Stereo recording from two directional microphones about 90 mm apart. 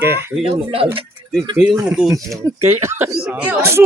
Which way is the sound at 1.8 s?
10° right (ahead or behind).